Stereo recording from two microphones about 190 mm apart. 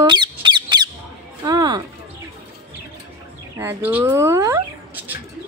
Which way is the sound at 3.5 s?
10° right (ahead or behind).